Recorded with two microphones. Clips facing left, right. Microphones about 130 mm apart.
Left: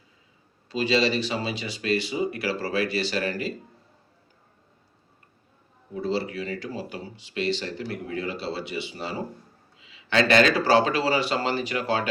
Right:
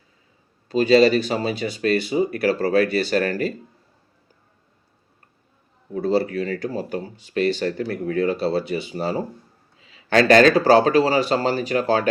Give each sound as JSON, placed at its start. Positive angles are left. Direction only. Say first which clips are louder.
{"t": 0.7, "sound": "speech", "louder": "right 8 dB", "side_deg": -45}
{"t": 5.9, "sound": "speech", "louder": "right 7 dB", "side_deg": -50}